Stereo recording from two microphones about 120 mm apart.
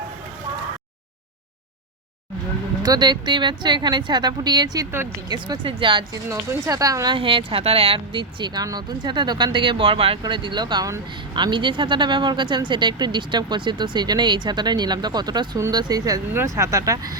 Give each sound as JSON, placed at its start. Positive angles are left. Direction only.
{"t": 2.8, "sound": "speech", "side_deg": -35}
{"t": 6.2, "sound": "speech", "side_deg": -25}
{"t": 7.2, "sound": "speech", "side_deg": -45}